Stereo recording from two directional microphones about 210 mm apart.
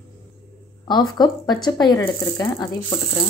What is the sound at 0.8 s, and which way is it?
Speech, 20° left (ahead or behind).